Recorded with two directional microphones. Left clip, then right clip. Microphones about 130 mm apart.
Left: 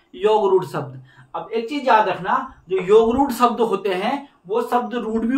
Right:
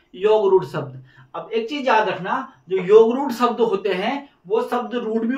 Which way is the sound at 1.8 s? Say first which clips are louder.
Left 3 dB; 25° left (ahead or behind).